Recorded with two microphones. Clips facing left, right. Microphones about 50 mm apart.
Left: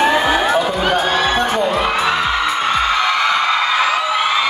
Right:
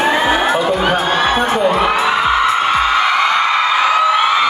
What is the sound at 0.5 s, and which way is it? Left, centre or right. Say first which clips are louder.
Speech: right 1 dB; centre.